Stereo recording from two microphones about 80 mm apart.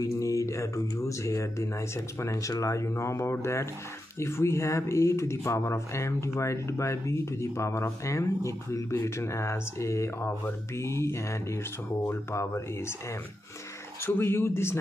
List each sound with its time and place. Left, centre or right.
0.0 s speech: left
14.0 s speech: left